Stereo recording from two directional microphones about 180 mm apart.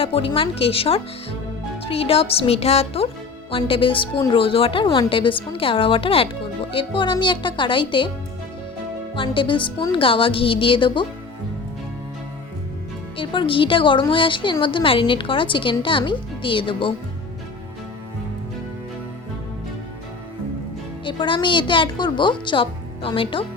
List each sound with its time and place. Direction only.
0.0 s speech: 30° left (ahead or behind)
9.1 s speech: 30° left (ahead or behind)
13.1 s speech: 30° left (ahead or behind)
21.0 s speech: 25° left (ahead or behind)